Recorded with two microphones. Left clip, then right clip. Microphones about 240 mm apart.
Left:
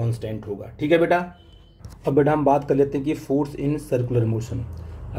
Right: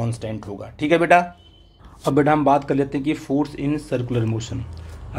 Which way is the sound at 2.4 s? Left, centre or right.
Centre.